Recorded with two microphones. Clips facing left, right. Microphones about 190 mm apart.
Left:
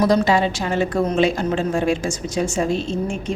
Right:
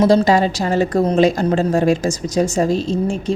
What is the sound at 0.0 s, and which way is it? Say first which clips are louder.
A woman's voice: right 4 dB; 30° right (ahead or behind).